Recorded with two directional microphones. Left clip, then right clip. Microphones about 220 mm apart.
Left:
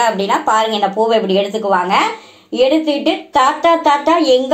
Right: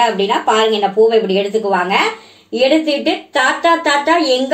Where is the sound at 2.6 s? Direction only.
15° left (ahead or behind).